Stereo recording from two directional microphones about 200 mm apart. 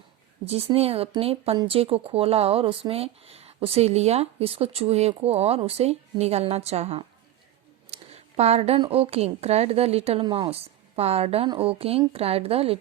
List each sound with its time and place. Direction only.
0.4 s a woman's voice: 30° right (ahead or behind)